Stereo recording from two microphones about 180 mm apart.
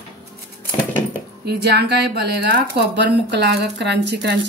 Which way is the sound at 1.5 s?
65° right (ahead or behind).